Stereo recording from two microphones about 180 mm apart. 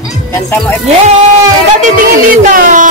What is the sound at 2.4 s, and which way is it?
Speech, 45° right (ahead or behind).